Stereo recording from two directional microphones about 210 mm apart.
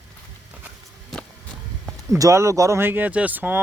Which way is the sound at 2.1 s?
15° right (ahead or behind).